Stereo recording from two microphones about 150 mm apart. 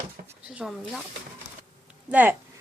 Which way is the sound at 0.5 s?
Centre (ahead or behind).